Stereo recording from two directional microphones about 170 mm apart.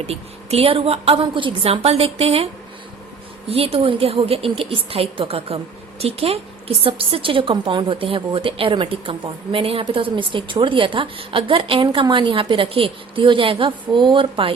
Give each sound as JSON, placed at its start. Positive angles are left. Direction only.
{"t": 0.1, "sound": "a woman's voice", "side_deg": -35}
{"t": 3.5, "sound": "a woman's voice", "side_deg": -35}